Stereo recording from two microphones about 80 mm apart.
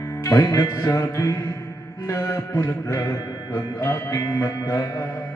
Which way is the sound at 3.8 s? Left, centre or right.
Left.